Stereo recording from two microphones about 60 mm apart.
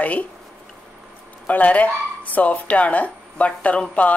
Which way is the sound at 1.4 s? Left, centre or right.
Left.